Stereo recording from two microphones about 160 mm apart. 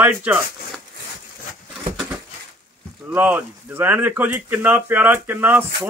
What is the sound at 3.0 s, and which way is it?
Speech, 10° right (ahead or behind).